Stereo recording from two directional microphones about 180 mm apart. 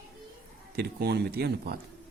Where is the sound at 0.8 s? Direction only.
65° right (ahead or behind).